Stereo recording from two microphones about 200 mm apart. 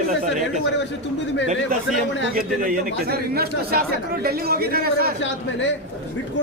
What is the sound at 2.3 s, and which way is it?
A man's voice, 45° right (ahead or behind).